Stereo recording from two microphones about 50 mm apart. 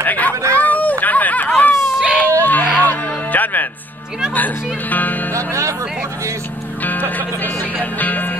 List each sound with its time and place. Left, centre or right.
0.0 s a sound: left
2.0 s baby cry: centre
2.4 s a sound: left
2.8 s music: left
5.3 s music: right
8.0 s music: left